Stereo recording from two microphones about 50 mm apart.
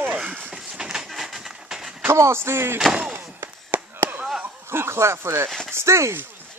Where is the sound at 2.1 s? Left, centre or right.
Right.